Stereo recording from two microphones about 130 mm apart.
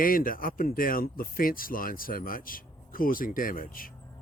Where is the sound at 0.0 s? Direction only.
90° left.